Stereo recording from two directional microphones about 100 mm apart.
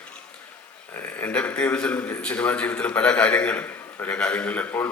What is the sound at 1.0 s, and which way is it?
A man's voice, 15° left (ahead or behind).